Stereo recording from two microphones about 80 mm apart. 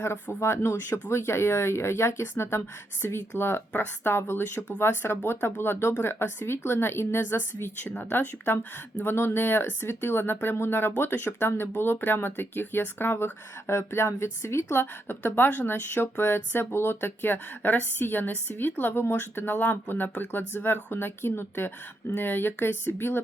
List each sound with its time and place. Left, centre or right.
0.0 s a woman's voice: left